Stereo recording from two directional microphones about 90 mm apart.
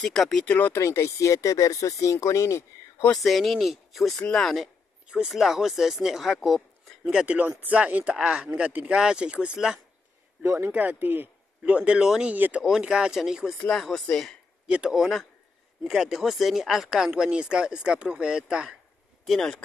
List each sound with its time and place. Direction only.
0.0 s speech: 5° left (ahead or behind)
0.7 s speech: 30° left (ahead or behind)
3.1 s speech: centre (ahead or behind)
5.0 s speech: 10° right (ahead or behind)
7.1 s speech: 10° right (ahead or behind)
12.6 s speech: 5° right (ahead or behind)
14.7 s speech: 5° right (ahead or behind)
19.2 s speech: 5° left (ahead or behind)